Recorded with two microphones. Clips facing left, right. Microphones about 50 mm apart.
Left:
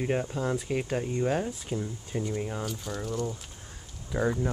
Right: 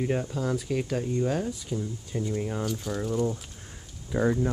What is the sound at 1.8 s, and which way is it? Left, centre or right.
Speech, centre.